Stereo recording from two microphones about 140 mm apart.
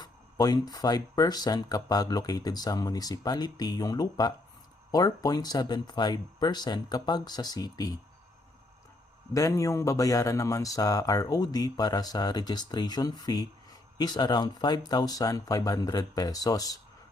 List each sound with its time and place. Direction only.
0.0 s speech: 30° left (ahead or behind)
9.3 s speech: 25° left (ahead or behind)